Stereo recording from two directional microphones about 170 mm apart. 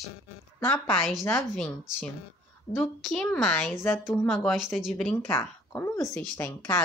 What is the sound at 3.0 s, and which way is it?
A woman's voice, 5° left (ahead or behind).